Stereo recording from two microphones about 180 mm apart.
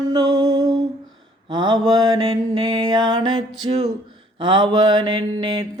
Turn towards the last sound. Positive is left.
turn(degrees=-25)  # may be behind; listen again after turning